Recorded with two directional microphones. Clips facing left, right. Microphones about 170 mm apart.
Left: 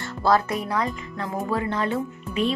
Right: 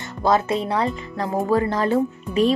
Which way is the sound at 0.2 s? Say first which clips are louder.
Right 2 dB; 20° right (ahead or behind).